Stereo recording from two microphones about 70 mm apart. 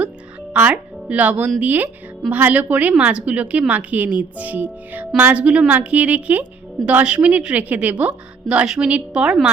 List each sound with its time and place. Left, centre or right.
0.5 s a woman's voice: centre